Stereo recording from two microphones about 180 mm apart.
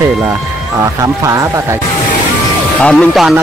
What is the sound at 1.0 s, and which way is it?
Speech, 15° right (ahead or behind).